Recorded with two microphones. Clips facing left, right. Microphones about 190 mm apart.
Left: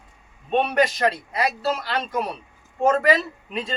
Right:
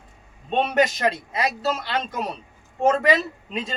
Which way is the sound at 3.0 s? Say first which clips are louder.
Even; 20° right (ahead or behind).